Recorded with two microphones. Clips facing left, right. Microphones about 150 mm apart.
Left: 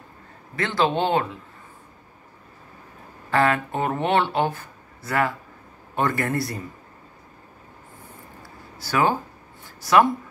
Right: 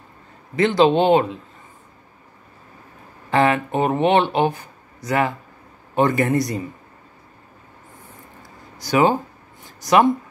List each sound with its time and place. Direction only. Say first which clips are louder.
0.6 s speech: right 7 dB; 20° right (ahead or behind)
3.3 s speech: right 3 dB; 20° right (ahead or behind)
8.4 s a sound: even; 15° right (ahead or behind)
9.8 s a woman's voice: right 2 dB; 20° right (ahead or behind)